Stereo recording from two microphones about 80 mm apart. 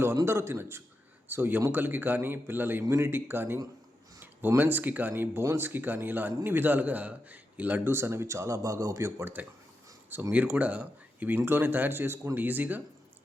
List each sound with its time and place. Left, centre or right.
0.3 s a man's voice: right